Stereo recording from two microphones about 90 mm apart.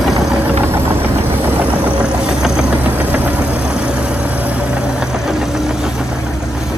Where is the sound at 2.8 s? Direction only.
20° right (ahead or behind).